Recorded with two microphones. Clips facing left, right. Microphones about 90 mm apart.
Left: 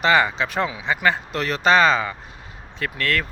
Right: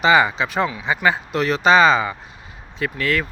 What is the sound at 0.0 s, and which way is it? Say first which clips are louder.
Speech: right 3 dB; 5° right (ahead or behind).